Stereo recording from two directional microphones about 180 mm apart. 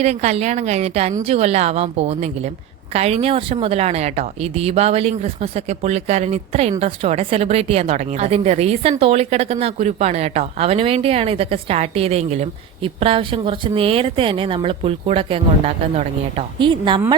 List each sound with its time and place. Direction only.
0.0 s a woman's voice: 40° right (ahead or behind)